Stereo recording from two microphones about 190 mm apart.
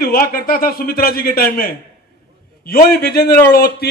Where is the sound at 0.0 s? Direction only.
50° left (ahead or behind).